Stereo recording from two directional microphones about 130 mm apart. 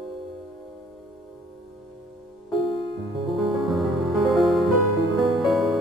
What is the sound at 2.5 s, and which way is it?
Music, 40° left (ahead or behind).